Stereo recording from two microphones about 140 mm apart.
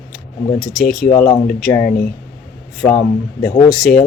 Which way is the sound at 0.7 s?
85° left.